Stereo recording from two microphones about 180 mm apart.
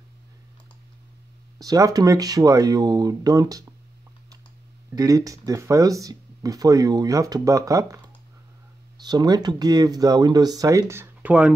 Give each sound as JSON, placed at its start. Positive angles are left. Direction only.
{"t": 1.6, "sound": "speech", "side_deg": -20}
{"t": 4.9, "sound": "speech", "side_deg": -20}